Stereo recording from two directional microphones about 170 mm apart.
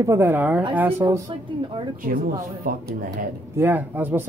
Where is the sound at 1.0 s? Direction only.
25° right (ahead or behind).